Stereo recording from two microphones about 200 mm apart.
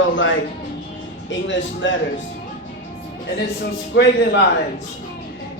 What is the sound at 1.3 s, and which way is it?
Speech, 65° left (ahead or behind).